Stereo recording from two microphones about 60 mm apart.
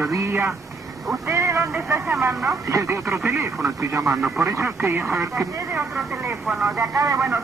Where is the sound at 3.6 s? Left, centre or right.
Right.